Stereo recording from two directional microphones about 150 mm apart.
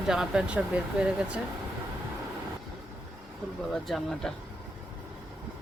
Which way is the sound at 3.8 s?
Centre (ahead or behind).